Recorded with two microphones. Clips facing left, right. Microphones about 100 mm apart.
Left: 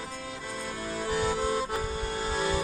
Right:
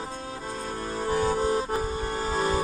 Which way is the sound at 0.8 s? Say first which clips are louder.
Right 3 dB; 40° right (ahead or behind).